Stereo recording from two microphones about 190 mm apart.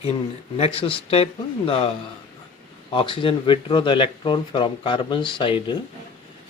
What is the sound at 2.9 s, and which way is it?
Speech, 25° left (ahead or behind).